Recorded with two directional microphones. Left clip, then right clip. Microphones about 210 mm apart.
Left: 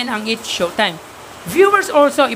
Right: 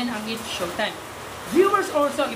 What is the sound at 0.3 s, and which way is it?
Speech, 35° left (ahead or behind).